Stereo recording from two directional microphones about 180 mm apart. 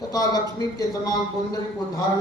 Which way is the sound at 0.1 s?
20° left (ahead or behind).